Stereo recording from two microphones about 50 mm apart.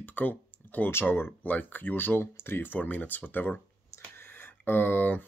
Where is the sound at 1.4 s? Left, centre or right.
Left.